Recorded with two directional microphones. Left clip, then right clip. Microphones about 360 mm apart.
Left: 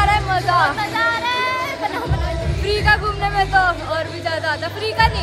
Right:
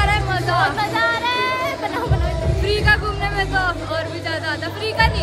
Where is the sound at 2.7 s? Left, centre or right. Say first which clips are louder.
Left 1 dB; centre.